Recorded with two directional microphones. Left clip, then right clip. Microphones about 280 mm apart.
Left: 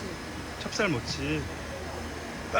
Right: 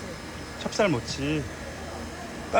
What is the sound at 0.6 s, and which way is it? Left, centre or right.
Speech, centre.